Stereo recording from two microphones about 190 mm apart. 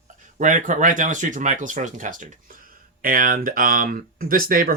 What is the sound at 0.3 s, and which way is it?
Speech, 45° right (ahead or behind).